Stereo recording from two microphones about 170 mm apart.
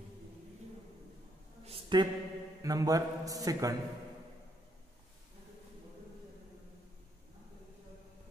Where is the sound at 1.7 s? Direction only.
30° right (ahead or behind).